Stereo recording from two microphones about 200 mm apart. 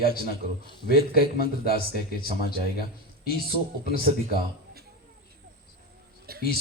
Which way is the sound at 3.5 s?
50° right (ahead or behind).